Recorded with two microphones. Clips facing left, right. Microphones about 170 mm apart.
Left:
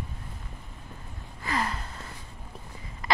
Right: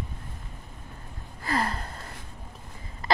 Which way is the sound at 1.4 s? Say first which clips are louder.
Right 2 dB; 40° right (ahead or behind).